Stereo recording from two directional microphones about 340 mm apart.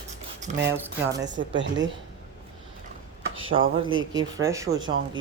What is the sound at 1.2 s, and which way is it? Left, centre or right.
Speech, right.